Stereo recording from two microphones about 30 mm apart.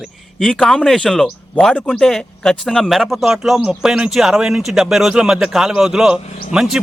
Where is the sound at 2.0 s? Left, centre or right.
Centre.